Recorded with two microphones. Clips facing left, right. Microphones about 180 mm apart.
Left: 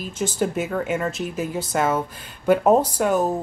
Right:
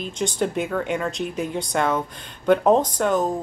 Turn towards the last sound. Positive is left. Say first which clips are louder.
# left 1 dB
turn(degrees=10)  # may be behind; listen again after turning